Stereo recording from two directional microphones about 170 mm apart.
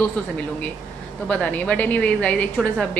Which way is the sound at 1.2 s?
5° left (ahead or behind).